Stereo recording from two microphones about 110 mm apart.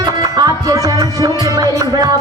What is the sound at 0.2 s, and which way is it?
Music, 35° right (ahead or behind).